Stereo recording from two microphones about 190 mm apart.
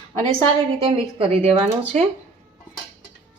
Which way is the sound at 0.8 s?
30° right (ahead or behind).